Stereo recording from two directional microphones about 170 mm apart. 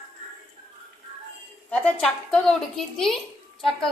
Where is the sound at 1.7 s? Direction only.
10° left (ahead or behind).